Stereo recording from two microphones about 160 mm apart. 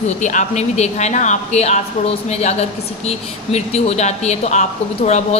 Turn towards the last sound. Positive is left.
turn(degrees=45)  # may be behind; listen again after turning